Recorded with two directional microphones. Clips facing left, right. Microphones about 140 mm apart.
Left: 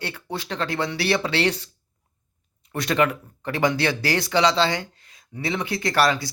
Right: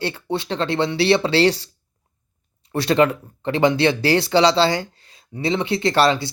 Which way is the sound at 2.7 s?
30° right (ahead or behind).